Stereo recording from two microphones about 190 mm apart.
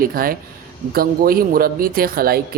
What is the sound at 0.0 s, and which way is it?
Speech, 50° right (ahead or behind).